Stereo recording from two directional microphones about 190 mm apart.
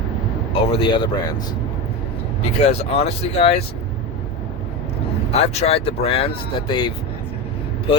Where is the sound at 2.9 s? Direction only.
30° left (ahead or behind).